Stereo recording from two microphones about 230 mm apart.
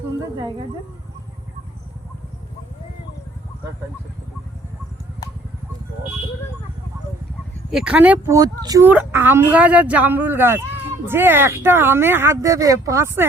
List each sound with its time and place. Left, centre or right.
0.2 s speech: centre
7.7 s speech: centre